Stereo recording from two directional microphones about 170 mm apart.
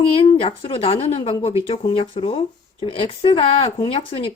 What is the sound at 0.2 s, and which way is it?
Speech, 35° left (ahead or behind).